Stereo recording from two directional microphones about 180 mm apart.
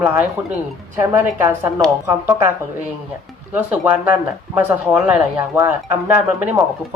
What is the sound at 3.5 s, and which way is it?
Speech, 10° right (ahead or behind).